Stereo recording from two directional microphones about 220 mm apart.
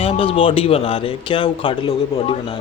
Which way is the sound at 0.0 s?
25° left (ahead or behind).